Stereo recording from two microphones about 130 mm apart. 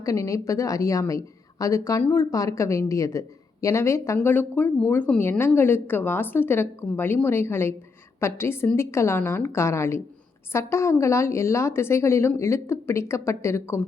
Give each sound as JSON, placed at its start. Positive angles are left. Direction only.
{"t": 0.0, "sound": "a woman's voice", "side_deg": 25}